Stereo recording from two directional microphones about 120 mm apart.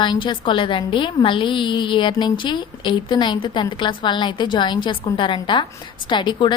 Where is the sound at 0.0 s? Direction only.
40° left (ahead or behind).